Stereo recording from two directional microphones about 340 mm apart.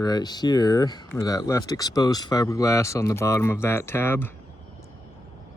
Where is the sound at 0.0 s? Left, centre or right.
Centre.